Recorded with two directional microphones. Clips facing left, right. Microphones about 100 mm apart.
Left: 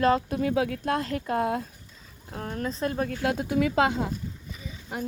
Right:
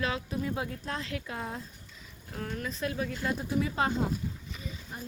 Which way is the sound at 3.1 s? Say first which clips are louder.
Left 5 dB; 70° left (ahead or behind).